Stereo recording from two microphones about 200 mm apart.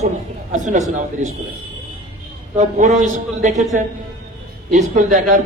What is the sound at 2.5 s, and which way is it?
A man's voice, 35° right (ahead or behind).